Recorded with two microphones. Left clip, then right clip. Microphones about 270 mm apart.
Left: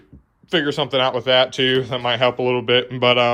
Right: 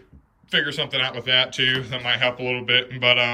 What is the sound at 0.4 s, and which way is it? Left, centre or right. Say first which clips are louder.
Speech: left 3 dB; centre.